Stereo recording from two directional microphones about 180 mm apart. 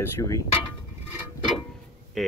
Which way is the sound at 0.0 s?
15° left (ahead or behind).